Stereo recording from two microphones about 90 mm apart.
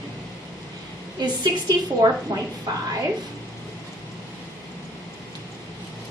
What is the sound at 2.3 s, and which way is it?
Speech, 55° right (ahead or behind).